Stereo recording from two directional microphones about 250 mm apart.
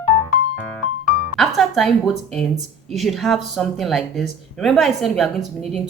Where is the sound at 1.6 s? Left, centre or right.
Centre.